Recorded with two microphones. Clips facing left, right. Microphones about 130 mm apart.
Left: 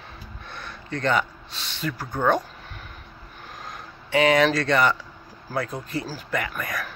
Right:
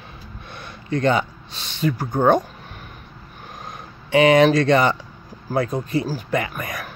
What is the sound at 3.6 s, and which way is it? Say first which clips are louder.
Speech: right 2 dB; 20° right (ahead or behind).